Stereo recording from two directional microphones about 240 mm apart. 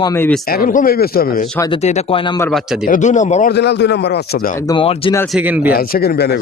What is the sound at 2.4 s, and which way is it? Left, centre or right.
Speech, centre.